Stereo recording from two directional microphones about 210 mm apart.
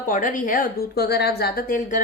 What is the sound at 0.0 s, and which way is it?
A woman's voice, 40° left (ahead or behind).